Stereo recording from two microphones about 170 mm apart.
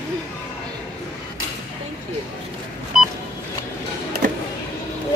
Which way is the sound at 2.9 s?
5° right (ahead or behind).